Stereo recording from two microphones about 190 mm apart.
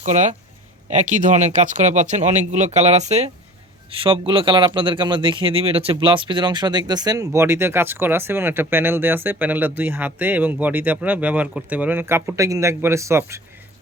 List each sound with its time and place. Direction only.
0.0 s a man's voice: 40° right (ahead or behind); by 13.4 s 15° right (ahead or behind)